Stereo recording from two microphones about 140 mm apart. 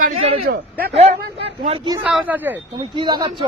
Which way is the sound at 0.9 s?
50° right (ahead or behind).